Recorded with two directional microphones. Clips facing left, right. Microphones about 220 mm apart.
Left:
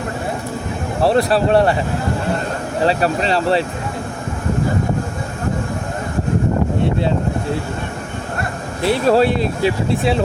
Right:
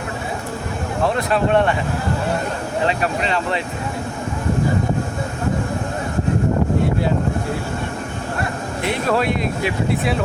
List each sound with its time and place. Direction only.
1.0 s speech: 35° left (ahead or behind)
2.8 s speech: 35° left (ahead or behind)
8.8 s speech: 30° left (ahead or behind)